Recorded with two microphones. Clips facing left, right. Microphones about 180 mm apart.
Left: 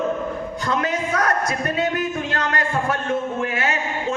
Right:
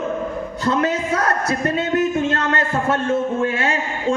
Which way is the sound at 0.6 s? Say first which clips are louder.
Right 4 dB; 25° right (ahead or behind).